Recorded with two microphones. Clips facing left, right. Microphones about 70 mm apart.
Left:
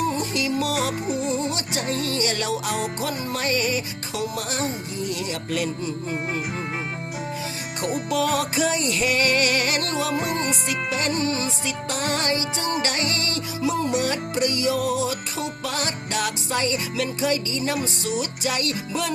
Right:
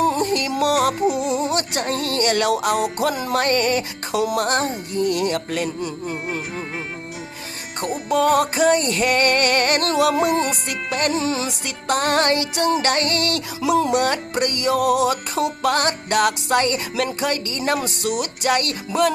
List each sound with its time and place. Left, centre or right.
0.0 s music: right
1.3 s music: right
1.5 s music: right
3.0 s music: right
3.3 s music: right
8.1 s music: right
10.2 s music: centre
10.7 s music: right
11.1 s music: right
11.6 s music: right
13.9 s music: right